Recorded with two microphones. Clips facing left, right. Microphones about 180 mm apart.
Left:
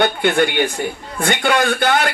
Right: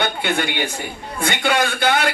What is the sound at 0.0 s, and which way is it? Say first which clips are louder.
Speech: left 6 dB; 50° left (ahead or behind).